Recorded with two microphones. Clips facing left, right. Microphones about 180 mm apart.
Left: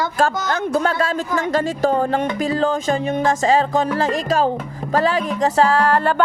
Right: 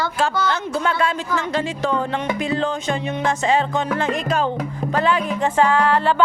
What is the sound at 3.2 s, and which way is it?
Speech, 40° left (ahead or behind).